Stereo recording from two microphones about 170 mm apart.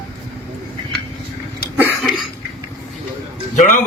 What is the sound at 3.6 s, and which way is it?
Speech, 50° left (ahead or behind).